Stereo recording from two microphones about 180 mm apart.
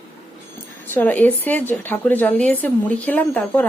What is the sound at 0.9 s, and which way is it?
A woman's voice, 10° left (ahead or behind).